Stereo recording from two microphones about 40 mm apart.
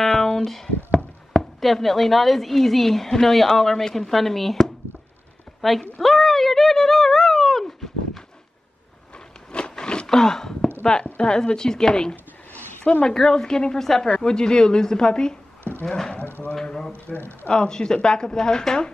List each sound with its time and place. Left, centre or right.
0.1 s a sound: left
0.5 s speech: centre
9.1 s a sound: left
10.0 s speech: centre
11.1 s a woman's voice: left
16.6 s speech: centre